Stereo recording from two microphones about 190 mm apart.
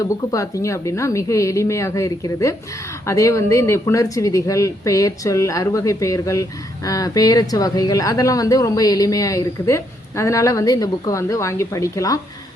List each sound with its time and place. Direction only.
0.0 s speech: 15° left (ahead or behind)